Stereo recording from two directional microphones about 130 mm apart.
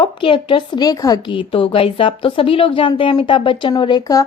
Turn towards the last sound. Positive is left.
turn(degrees=30)  # may be behind; listen again after turning